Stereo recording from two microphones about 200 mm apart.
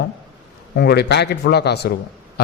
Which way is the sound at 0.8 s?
55° left (ahead or behind).